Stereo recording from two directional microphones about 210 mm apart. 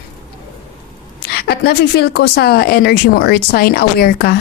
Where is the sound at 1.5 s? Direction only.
50° left (ahead or behind).